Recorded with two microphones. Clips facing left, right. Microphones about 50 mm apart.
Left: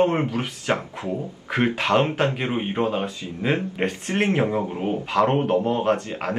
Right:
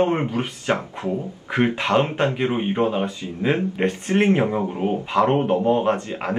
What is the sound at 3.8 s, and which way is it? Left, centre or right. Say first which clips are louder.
Speech: right 5 dB; centre.